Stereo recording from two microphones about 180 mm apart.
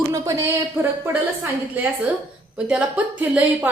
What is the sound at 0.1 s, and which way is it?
Speech, 20° right (ahead or behind).